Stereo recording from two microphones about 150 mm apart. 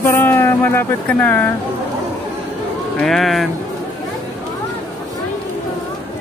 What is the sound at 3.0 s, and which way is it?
Speech, centre (ahead or behind).